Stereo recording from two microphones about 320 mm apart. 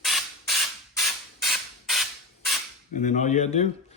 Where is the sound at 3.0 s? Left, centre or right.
Left.